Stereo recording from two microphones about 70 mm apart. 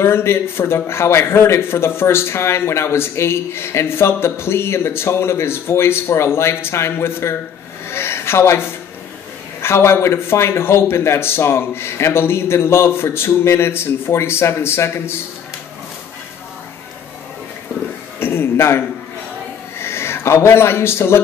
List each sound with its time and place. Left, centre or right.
0.0 s a man's voice: left
18.2 s a man's voice: left
19.8 s speech: left